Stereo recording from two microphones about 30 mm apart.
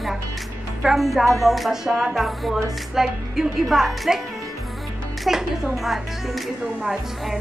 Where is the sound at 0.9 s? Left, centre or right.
Centre.